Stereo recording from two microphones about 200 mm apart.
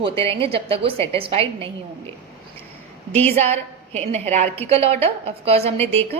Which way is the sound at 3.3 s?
30° right (ahead or behind).